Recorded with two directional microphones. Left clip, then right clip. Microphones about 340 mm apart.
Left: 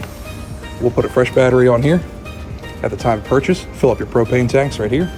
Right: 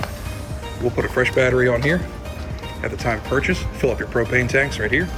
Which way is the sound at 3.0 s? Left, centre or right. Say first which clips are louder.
Left 5 dB; centre.